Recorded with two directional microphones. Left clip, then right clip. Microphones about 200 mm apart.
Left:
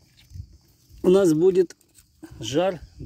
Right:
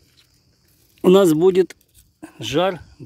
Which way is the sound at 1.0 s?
25° right (ahead or behind).